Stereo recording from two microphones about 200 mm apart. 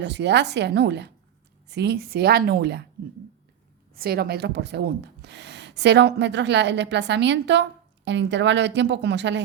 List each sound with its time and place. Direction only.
0.0 s speech: 60° right (ahead or behind)
3.9 s speech: 50° right (ahead or behind)